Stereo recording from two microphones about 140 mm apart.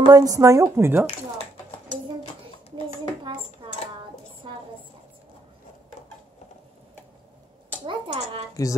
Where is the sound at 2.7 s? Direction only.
35° right (ahead or behind).